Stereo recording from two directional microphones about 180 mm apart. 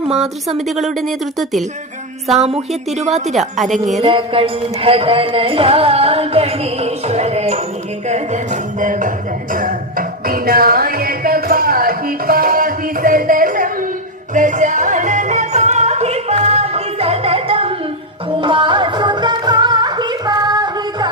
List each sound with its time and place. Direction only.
0.4 s speech: centre (ahead or behind)
3.0 s music: 40° right (ahead or behind)
3.3 s speech: centre (ahead or behind)
4.0 s music: 30° right (ahead or behind)